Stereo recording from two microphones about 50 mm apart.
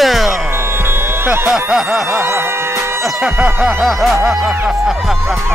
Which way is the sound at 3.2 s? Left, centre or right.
Centre.